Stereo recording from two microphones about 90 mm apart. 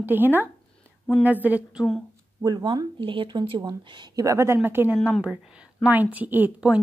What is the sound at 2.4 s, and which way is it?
Speech, 55° right (ahead or behind).